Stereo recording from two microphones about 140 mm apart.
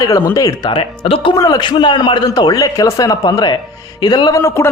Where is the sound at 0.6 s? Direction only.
35° left (ahead or behind).